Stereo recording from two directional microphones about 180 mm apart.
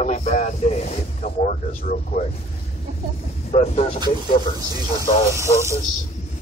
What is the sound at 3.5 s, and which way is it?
Speech, 40° left (ahead or behind).